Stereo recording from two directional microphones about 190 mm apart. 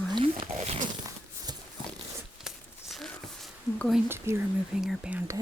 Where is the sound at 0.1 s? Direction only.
25° right (ahead or behind).